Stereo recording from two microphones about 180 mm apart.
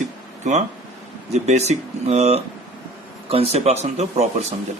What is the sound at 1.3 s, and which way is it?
A man's voice, 40° right (ahead or behind).